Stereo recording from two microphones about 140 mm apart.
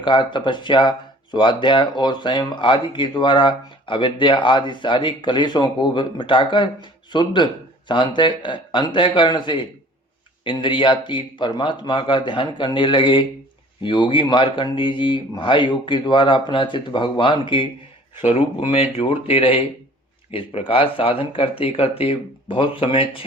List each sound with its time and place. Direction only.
0.0 s speech: 35° left (ahead or behind)
18.3 s speech: 50° left (ahead or behind)